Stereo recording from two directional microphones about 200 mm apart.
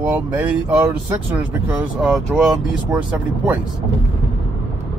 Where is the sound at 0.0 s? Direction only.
10° right (ahead or behind).